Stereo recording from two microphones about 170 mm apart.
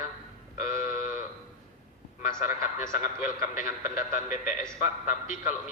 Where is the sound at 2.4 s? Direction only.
50° left (ahead or behind).